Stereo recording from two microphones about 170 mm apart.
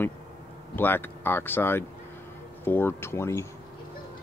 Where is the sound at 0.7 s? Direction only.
10° left (ahead or behind).